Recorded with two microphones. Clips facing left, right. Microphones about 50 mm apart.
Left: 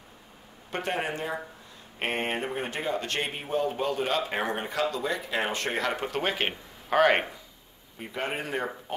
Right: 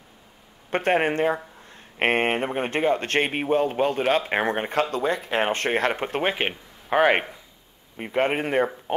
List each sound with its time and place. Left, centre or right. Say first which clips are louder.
0.7 s speech: right 9 dB; right; by 7.2 s centre
8.0 s speech: right 9 dB; right